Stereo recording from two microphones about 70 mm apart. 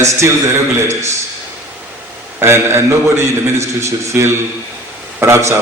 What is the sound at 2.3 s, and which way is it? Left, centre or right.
A man's voice, right.